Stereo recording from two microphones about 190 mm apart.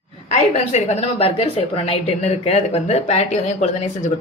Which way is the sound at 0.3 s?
35° left (ahead or behind).